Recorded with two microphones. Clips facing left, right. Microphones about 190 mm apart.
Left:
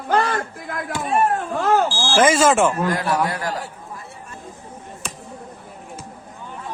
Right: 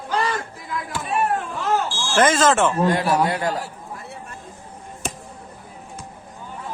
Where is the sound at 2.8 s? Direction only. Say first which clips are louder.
Right 2 dB; 25° right (ahead or behind).